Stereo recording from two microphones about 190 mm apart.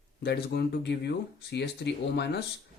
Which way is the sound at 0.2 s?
60° left (ahead or behind).